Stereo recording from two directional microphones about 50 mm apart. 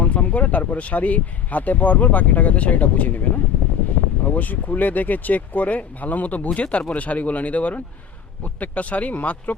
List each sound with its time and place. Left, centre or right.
0.0 s speech: left